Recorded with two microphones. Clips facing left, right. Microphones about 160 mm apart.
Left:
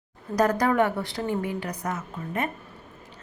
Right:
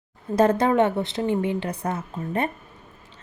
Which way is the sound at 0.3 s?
25° right (ahead or behind).